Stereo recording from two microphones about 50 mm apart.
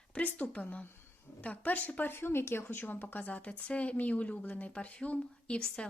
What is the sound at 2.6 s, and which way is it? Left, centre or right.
Speech, left.